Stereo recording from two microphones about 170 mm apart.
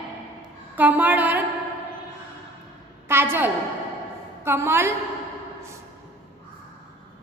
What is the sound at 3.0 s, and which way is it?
A woman's voice, 15° right (ahead or behind).